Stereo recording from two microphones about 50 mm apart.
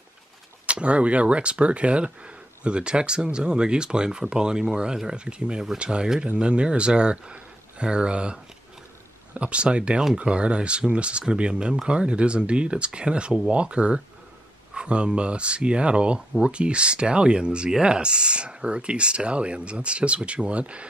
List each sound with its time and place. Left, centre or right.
0.7 s speech: right